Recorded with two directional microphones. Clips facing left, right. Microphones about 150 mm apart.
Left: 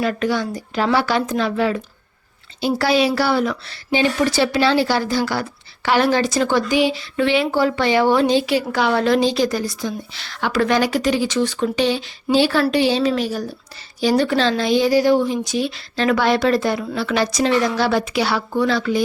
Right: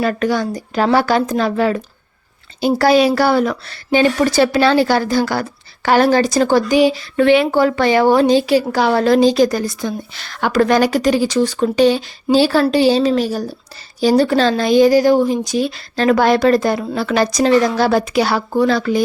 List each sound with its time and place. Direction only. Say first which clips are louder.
0.0 s a woman's voice: right 3 dB; 45° right (ahead or behind)